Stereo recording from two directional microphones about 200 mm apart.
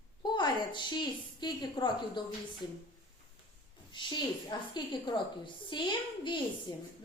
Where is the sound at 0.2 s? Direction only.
20° left (ahead or behind).